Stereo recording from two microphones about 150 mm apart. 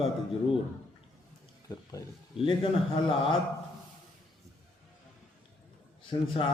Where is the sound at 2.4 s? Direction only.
35° left (ahead or behind).